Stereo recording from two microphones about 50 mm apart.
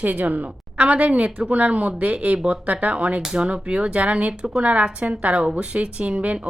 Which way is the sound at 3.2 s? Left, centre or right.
Centre.